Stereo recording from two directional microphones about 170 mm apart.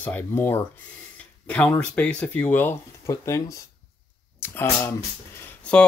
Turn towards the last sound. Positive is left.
turn(degrees=10)  # may be behind; listen again after turning